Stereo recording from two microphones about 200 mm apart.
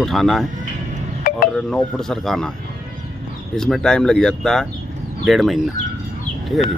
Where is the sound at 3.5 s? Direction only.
Centre (ahead or behind).